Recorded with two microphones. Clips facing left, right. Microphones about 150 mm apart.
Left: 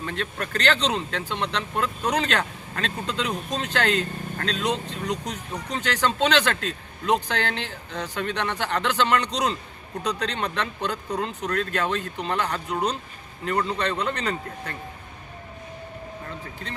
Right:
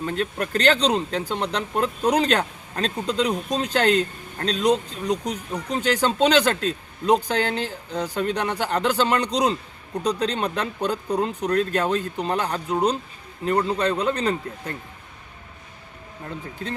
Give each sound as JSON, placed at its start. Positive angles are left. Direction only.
{"t": 0.0, "sound": "speech", "side_deg": -35}